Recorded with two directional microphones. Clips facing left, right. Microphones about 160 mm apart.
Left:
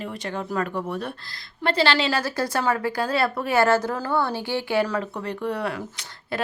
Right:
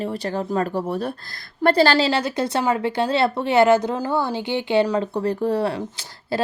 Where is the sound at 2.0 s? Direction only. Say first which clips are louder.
Right 3 dB; 25° right (ahead or behind).